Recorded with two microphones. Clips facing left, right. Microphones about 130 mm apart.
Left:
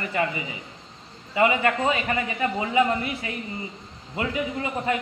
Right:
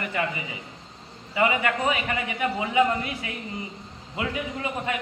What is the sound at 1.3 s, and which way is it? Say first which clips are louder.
Speech: left 2 dB; 25° left (ahead or behind).